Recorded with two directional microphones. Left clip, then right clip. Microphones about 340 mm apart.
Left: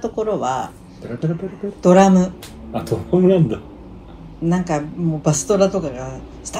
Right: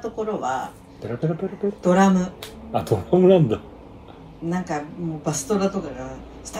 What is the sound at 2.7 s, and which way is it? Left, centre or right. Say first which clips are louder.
Speech: even; right.